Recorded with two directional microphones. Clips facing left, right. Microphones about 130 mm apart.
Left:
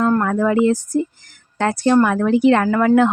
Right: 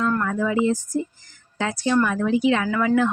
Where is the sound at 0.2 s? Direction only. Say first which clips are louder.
Left 6 dB; 55° left (ahead or behind).